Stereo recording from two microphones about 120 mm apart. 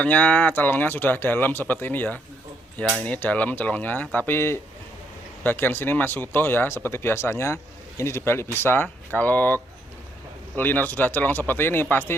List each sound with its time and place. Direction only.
0.0 s speech: 15° left (ahead or behind)